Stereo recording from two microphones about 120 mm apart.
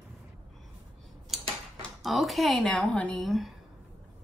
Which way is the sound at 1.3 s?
5° right (ahead or behind).